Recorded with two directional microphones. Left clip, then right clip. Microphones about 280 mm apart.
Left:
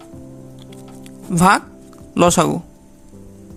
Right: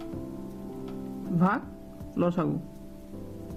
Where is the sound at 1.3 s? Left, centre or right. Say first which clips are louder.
Left 15 dB; left.